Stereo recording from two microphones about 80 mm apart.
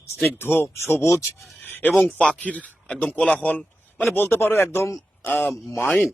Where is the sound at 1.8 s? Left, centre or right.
Centre; by 5.0 s left.